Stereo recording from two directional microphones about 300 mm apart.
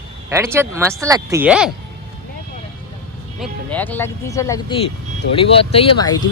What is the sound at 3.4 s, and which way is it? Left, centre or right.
Speech, centre.